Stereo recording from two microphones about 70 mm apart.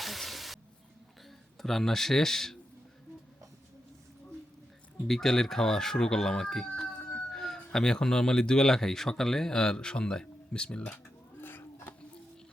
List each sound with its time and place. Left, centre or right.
0.0 s hiss: centre
1.5 s speech: centre
5.0 s speech: centre
11.3 s a sound: left